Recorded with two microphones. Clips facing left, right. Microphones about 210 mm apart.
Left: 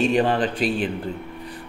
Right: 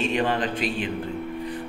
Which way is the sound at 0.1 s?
35° left (ahead or behind).